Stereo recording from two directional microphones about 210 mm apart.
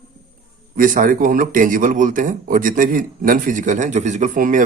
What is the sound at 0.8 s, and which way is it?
A man's voice, 40° right (ahead or behind).